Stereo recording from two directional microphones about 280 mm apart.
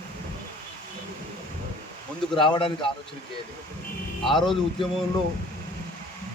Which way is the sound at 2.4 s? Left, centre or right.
Centre.